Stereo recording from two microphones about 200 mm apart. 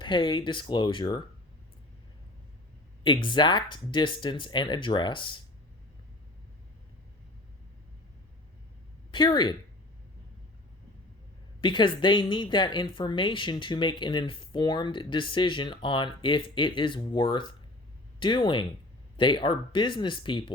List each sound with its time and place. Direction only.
0.0 s a woman's voice: 25° left (ahead or behind)
3.0 s a woman's voice: 25° left (ahead or behind)
9.1 s a woman's voice: 20° left (ahead or behind)
11.6 s a woman's voice: 25° left (ahead or behind)